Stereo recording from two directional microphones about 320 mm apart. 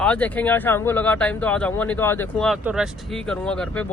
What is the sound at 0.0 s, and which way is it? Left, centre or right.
Speech, centre.